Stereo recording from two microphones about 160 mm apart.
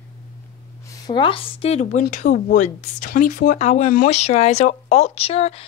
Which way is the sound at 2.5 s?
50° left (ahead or behind).